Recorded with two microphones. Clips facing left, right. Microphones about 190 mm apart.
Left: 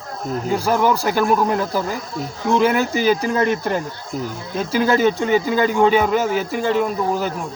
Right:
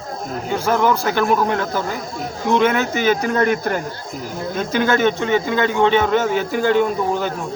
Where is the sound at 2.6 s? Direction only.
35° left (ahead or behind).